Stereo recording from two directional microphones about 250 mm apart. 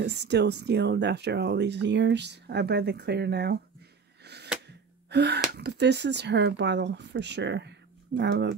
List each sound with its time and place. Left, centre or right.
0.0 s speech: right
4.2 s a sound: right
4.6 s gasp: right
5.6 s speech: right